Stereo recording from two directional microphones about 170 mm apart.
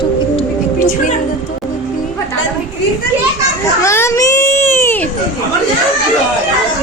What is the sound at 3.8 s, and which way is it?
Baby cry, 15° left (ahead or behind).